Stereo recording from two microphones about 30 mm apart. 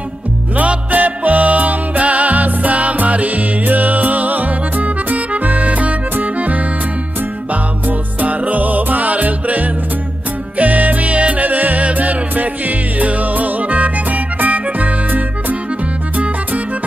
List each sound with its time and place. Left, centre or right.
0.6 s music: right
8.2 s music: right
11.4 s music: right
11.8 s music: right